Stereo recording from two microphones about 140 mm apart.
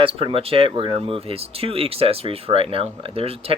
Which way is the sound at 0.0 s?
40° right (ahead or behind).